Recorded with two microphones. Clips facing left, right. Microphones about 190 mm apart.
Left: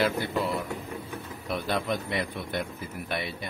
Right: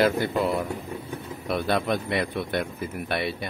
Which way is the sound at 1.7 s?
65° right (ahead or behind).